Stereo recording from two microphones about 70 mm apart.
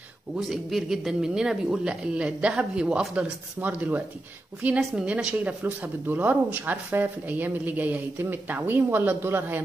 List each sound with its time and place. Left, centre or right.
0.4 s speech: centre
3.5 s a woman's voice: right
4.7 s a woman's voice: centre; by 9.6 s right